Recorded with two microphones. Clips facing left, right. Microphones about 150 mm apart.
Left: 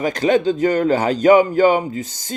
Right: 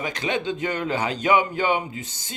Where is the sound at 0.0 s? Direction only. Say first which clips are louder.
Left 10 dB; 40° left (ahead or behind).